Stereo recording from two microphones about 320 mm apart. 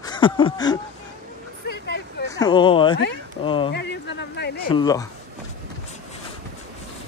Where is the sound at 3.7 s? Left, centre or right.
Left.